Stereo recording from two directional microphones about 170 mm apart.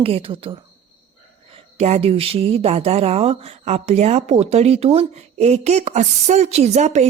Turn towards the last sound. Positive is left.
turn(degrees=-40)  # may be behind; listen again after turning